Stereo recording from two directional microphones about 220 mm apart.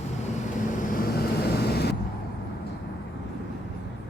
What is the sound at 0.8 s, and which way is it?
Vehicle, 40° left (ahead or behind).